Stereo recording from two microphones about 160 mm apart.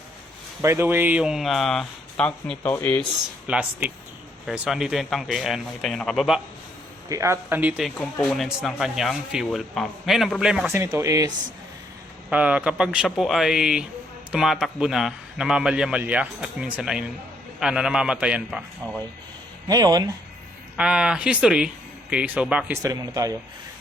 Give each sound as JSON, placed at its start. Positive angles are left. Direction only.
{"t": 0.6, "sound": "speech", "side_deg": -15}
{"t": 3.4, "sound": "speech", "side_deg": -10}
{"t": 7.1, "sound": "speech", "side_deg": -20}
{"t": 10.7, "sound": "speech", "side_deg": -15}
{"t": 12.3, "sound": "speech", "side_deg": -10}
{"t": 19.6, "sound": "speech", "side_deg": -25}
{"t": 20.7, "sound": "speech", "side_deg": -5}
{"t": 22.8, "sound": "speech", "side_deg": -20}